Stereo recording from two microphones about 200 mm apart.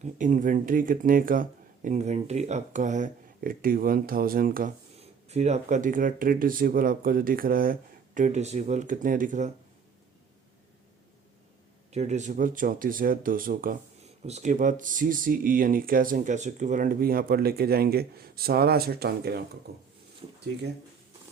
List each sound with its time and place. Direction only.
0.0 s speech: 40° right (ahead or behind)
4.9 s speech: 35° right (ahead or behind)
11.9 s speech: 35° right (ahead or behind)
14.3 s speech: 35° right (ahead or behind); by 19.5 s 50° right (ahead or behind)